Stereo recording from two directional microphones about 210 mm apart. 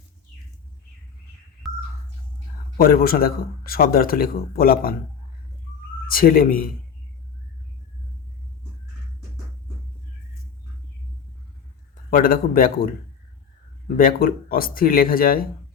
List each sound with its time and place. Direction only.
1.6 s music: centre (ahead or behind)
2.7 s a man's voice: 45° left (ahead or behind)
6.1 s a man's voice: 45° left (ahead or behind)
12.1 s a man's voice: 45° left (ahead or behind)